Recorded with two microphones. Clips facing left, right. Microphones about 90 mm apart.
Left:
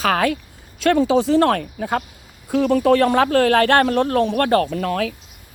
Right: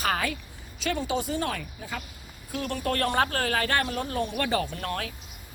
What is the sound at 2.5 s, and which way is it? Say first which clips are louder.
Speech: left 14 dB; 90° left.